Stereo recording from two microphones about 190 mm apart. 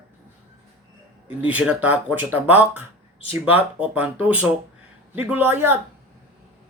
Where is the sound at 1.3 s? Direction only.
5° right (ahead or behind).